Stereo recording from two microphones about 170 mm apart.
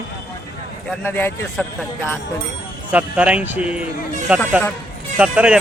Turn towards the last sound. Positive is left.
turn(degrees=-5)  # may be behind; listen again after turning